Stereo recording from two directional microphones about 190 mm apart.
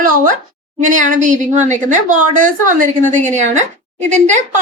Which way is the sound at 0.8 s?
40° right (ahead or behind).